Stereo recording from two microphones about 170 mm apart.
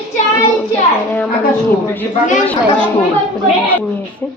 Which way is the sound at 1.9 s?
10° left (ahead or behind).